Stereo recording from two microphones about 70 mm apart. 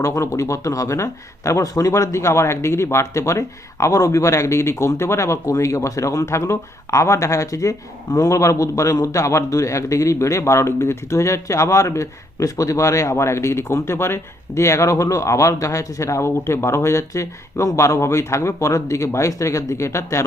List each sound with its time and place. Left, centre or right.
0.0 s speech: left